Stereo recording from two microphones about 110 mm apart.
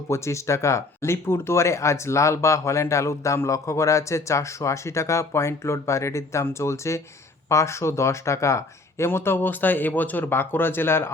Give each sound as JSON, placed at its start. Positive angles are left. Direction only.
{"t": 0.1, "sound": "speech", "side_deg": 25}